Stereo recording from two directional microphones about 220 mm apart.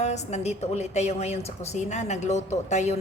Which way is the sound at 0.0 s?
30° left (ahead or behind).